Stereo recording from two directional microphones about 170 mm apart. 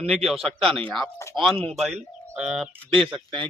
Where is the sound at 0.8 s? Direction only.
Centre (ahead or behind).